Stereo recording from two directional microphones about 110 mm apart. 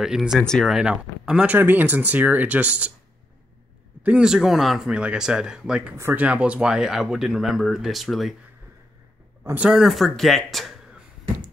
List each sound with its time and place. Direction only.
0.0 s speech: 5° right (ahead or behind)
0.4 s speech: 5° left (ahead or behind)
0.7 s speech: 10° right (ahead or behind)
4.0 s speech: 10° right (ahead or behind)
9.4 s a man's voice: 20° right (ahead or behind)
9.7 s speech: 5° right (ahead or behind)